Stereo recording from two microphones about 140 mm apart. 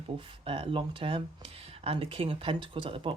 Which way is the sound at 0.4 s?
40° right (ahead or behind).